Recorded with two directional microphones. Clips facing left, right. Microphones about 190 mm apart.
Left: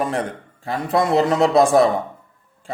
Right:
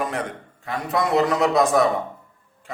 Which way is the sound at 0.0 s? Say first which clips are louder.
Left 4 dB; 30° left (ahead or behind).